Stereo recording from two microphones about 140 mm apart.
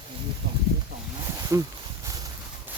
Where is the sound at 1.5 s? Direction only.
20° right (ahead or behind).